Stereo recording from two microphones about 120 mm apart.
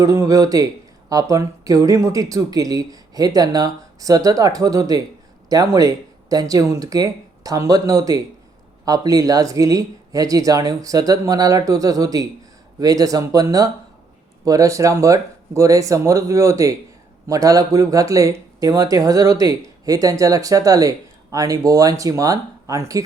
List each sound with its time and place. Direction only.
0.0 s speech: 25° right (ahead or behind)